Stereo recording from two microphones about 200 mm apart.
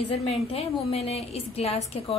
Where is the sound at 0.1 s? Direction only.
30° left (ahead or behind).